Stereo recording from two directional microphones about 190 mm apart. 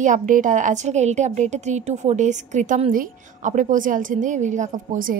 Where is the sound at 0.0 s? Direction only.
40° right (ahead or behind).